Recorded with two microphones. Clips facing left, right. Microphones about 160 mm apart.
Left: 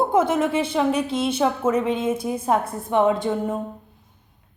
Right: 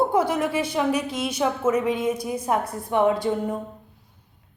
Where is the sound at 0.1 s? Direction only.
20° left (ahead or behind).